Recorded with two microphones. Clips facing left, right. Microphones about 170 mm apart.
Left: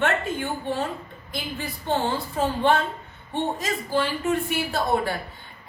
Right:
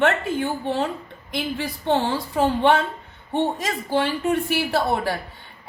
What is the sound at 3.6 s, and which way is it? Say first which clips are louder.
A woman's voice: right 2 dB; 70° right (ahead or behind).